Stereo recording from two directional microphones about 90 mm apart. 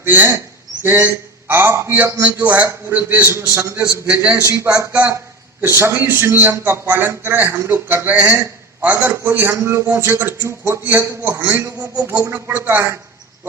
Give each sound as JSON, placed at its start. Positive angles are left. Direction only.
{"t": 0.0, "sound": "a man's voice", "side_deg": -20}
{"t": 4.0, "sound": "a man's voice", "side_deg": -15}
{"t": 4.3, "sound": "a man's voice", "side_deg": -35}
{"t": 4.9, "sound": "a man's voice", "side_deg": -15}
{"t": 5.6, "sound": "a man's voice", "side_deg": -30}